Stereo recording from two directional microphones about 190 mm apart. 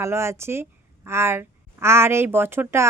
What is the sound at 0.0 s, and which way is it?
A woman's voice, 15° right (ahead or behind).